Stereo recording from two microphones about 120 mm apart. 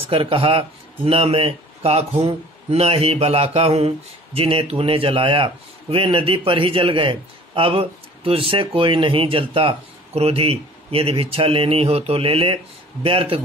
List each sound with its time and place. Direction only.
0.0 s speech: 50° right (ahead or behind)